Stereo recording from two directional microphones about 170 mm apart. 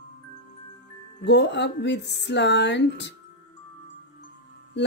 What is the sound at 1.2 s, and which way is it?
Speech, 90° left.